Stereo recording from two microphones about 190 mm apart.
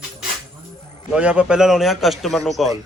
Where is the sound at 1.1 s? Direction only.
5° right (ahead or behind).